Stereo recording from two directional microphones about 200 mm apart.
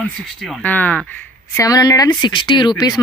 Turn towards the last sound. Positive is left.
turn(degrees=20)  # may be behind; listen again after turning